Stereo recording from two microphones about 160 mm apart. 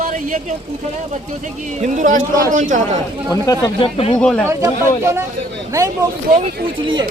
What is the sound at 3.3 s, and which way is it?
Speech, 25° left (ahead or behind).